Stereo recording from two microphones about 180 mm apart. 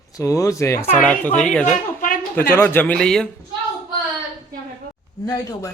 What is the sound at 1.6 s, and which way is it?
Speech, 50° left (ahead or behind).